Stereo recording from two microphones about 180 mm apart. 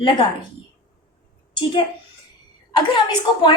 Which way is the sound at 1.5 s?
30° left (ahead or behind).